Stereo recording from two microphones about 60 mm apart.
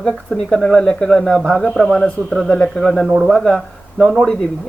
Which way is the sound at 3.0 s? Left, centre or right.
Centre.